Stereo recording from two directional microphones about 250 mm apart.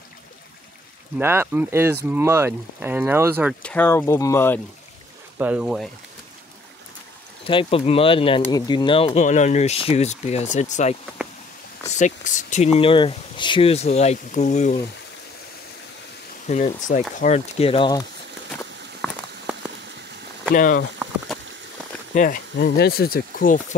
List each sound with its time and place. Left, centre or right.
1.1 s speech: centre
3.6 s speech: centre
5.4 s speech: centre
7.4 s speech: left
12.0 s speech: left
16.4 s speech: left
19.0 s rain on surface: centre
20.5 s speech: left
22.1 s speech: left